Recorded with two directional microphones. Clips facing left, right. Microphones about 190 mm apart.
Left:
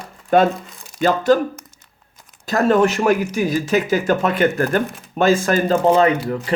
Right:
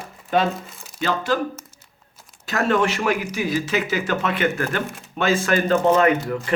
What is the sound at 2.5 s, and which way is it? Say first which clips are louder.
Speech: left 5 dB; 40° left (ahead or behind).